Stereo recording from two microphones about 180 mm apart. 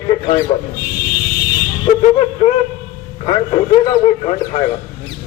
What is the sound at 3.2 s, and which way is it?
A man's voice, 25° left (ahead or behind).